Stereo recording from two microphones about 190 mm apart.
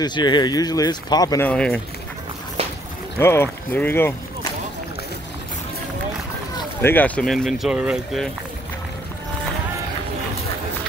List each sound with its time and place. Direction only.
0.0 s speech: 25° left (ahead or behind)
1.5 s speech: 5° left (ahead or behind)
3.2 s speech: 10° left (ahead or behind)
6.8 s speech: 10° left (ahead or behind)